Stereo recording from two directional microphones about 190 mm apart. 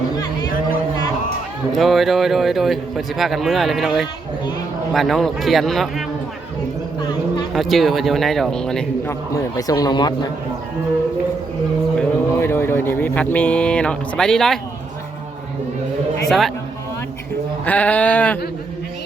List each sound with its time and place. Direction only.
1.7 s a man's voice: centre (ahead or behind)
7.5 s a man's voice: centre (ahead or behind)
9.3 s speech: 20° left (ahead or behind)
11.9 s speech: 10° left (ahead or behind)
17.7 s speech: 5° left (ahead or behind)